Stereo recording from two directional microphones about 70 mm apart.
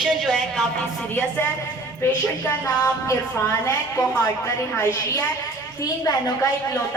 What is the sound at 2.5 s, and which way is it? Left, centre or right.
Music, left.